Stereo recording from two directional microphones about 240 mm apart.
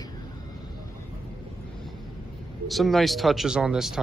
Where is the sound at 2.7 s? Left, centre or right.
Centre.